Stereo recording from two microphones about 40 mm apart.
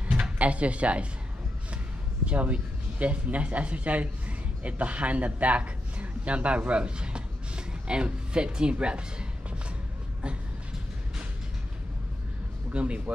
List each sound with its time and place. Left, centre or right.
0.4 s speech: right
2.2 s speech: right
12.7 s speech: right